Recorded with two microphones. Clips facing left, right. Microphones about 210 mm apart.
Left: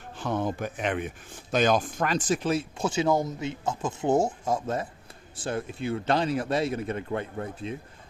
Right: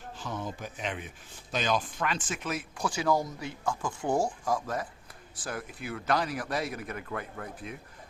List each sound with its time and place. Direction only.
0.2 s speech: 60° left (ahead or behind); by 7.8 s 25° left (ahead or behind)